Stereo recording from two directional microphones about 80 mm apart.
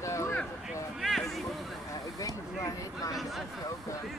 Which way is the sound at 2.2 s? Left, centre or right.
Left.